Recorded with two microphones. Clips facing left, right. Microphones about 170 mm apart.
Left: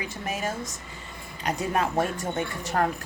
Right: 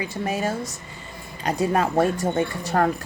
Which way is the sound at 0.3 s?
35° right (ahead or behind).